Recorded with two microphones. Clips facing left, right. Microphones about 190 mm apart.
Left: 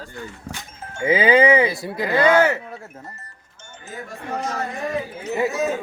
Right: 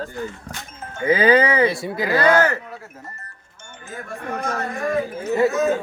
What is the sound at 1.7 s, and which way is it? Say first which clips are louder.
Speech: right 2 dB; centre (ahead or behind).